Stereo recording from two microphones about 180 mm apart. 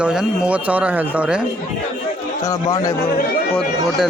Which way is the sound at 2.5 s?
20° left (ahead or behind).